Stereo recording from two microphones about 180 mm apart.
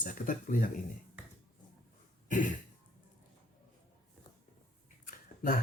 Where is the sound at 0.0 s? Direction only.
45° left (ahead or behind).